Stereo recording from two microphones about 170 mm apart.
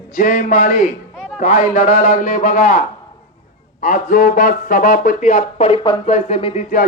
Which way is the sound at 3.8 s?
55° left (ahead or behind).